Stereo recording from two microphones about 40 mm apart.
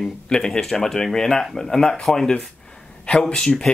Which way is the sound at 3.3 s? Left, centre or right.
Left.